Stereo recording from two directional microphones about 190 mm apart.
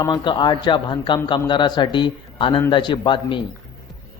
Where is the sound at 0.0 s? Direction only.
25° left (ahead or behind).